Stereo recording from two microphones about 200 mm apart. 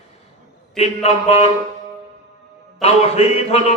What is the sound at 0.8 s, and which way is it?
Speech, 30° left (ahead or behind).